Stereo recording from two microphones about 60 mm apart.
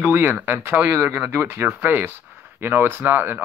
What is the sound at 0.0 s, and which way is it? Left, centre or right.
Speech, right.